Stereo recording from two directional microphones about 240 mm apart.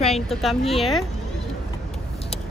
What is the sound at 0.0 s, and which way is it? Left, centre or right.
Speech, centre.